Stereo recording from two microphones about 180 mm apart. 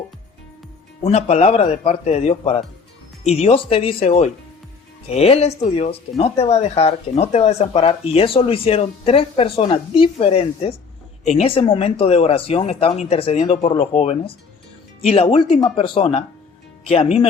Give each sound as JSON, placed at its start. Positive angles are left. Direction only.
{"t": 1.0, "sound": "speech", "side_deg": 35}